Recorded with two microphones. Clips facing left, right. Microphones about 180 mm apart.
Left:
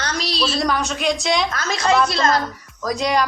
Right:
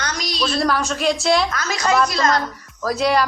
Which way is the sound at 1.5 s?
25° left (ahead or behind).